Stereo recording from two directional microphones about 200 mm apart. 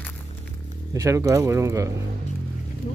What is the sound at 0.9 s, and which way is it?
Speech, 15° right (ahead or behind).